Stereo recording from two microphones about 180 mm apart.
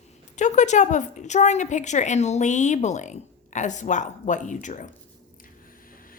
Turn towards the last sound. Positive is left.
turn(degrees=45)  # may be behind; listen again after turning